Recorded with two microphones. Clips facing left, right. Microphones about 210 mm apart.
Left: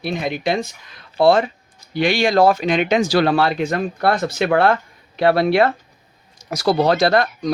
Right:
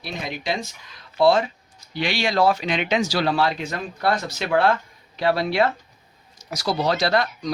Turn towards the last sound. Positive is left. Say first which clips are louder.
# left 5 dB
turn(degrees=50)  # may be behind; listen again after turning